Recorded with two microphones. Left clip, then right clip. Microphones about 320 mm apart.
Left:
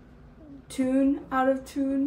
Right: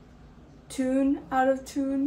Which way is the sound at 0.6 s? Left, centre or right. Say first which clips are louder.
Left 1 dB; centre.